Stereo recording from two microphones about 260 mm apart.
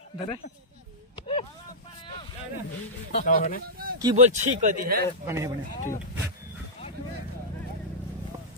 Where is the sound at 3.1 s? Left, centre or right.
Left.